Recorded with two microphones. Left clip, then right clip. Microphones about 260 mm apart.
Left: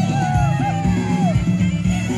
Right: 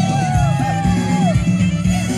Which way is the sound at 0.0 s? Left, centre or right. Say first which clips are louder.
Right 2 dB; right.